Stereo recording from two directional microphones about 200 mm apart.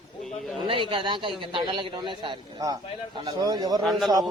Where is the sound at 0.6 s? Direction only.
25° right (ahead or behind).